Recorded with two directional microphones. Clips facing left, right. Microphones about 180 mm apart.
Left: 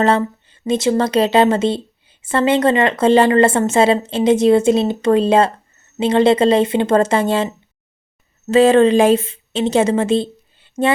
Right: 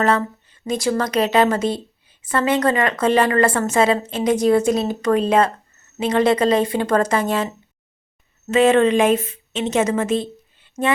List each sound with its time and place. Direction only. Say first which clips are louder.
0.0 s a woman's voice: left 3 dB; 25° left (ahead or behind)